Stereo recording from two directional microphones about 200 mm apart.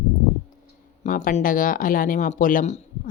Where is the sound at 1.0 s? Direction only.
40° left (ahead or behind).